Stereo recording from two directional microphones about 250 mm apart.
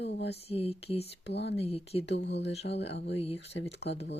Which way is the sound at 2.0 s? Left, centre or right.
Left.